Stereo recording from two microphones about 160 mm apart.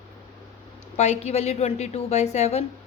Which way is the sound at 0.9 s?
45° left (ahead or behind).